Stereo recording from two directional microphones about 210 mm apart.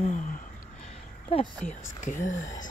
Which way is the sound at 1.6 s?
35° left (ahead or behind).